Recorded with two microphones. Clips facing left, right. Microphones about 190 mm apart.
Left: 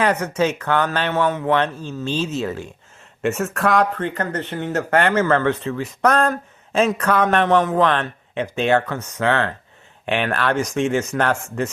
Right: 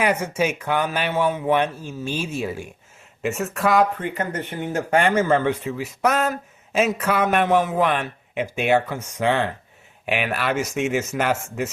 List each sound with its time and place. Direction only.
0.0 s speech: 10° right (ahead or behind)
3.2 s speech: centre (ahead or behind)